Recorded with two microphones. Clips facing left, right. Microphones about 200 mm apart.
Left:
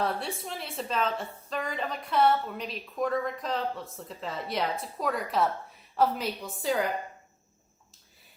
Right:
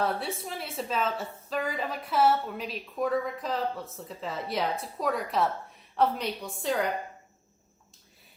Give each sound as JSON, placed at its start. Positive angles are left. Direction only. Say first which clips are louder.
{"t": 0.0, "sound": "a woman's voice", "louder": "right 1 dB", "side_deg": 0}